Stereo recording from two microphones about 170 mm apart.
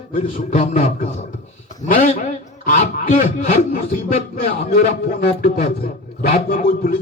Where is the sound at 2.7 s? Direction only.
45° left (ahead or behind).